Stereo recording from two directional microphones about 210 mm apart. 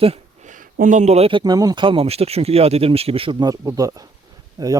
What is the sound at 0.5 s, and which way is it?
Speech, 40° right (ahead or behind).